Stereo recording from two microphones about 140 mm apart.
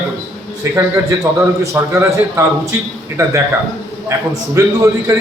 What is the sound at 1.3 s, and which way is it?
A man's voice, 15° right (ahead or behind).